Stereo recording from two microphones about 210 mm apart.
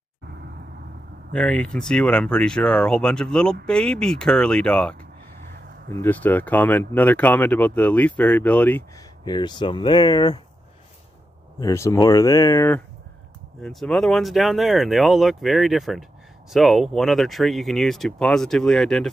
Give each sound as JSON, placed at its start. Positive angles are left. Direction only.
{"t": 1.3, "sound": "speech", "side_deg": 5}
{"t": 9.2, "sound": "speech", "side_deg": 20}
{"t": 11.6, "sound": "speech", "side_deg": 15}